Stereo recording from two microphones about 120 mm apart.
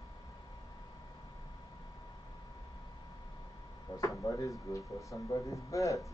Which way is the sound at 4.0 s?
30° left (ahead or behind).